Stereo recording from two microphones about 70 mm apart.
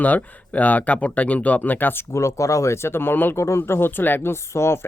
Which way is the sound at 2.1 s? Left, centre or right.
Left.